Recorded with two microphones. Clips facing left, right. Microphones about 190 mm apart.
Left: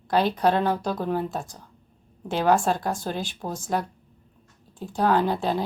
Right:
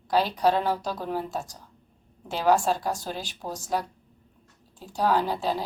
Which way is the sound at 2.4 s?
55° left (ahead or behind).